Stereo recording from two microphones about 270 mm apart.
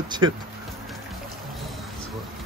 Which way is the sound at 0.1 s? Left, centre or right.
Centre.